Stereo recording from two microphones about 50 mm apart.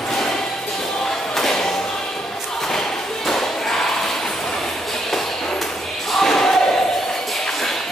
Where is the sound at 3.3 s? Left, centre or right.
Centre.